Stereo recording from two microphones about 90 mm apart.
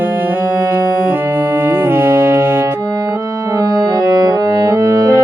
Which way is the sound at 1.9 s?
20° right (ahead or behind).